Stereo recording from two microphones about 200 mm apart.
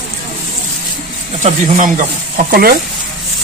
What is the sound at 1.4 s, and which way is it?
Speech, 40° right (ahead or behind).